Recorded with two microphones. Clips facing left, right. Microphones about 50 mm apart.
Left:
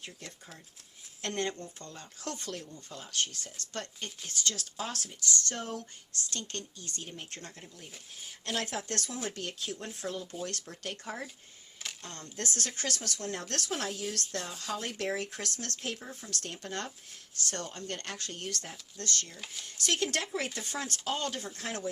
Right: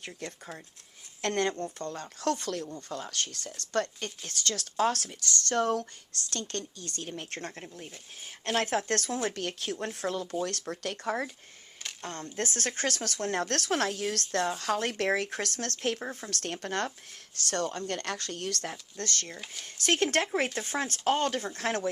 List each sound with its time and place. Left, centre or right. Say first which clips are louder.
0.0 s speech: right 6 dB; right
2.6 s speech: right 8 dB; right
10.4 s speech: right 5 dB; right
11.0 s speech: right 11 dB; right
12.0 s speech: right 5 dB; right
17.5 s speech: right 9 dB; right
18.9 s speech: left 1 dB; right